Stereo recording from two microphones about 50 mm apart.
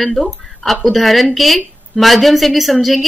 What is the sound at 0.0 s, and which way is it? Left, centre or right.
A woman's voice, centre.